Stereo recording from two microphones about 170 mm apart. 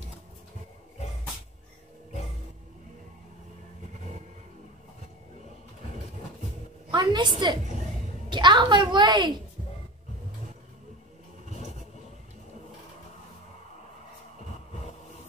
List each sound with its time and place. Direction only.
6.9 s a woman's voice: 25° right (ahead or behind)